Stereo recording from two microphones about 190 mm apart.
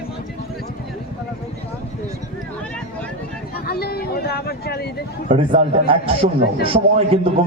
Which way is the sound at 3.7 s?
55° left (ahead or behind).